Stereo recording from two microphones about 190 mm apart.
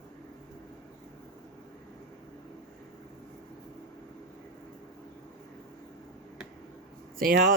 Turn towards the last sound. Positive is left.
turn(degrees=-50)  # may be behind; listen again after turning